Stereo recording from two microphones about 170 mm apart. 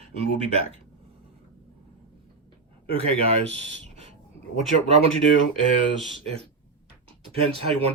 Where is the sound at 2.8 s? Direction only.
35° right (ahead or behind).